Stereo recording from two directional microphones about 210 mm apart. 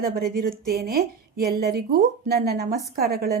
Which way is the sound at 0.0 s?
45° right (ahead or behind).